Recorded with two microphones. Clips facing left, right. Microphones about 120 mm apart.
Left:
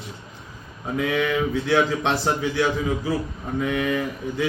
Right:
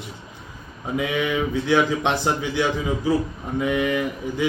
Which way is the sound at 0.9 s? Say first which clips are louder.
Left 1 dB; 10° right (ahead or behind).